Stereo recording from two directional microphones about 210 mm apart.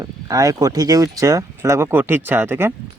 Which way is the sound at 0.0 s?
15° right (ahead or behind).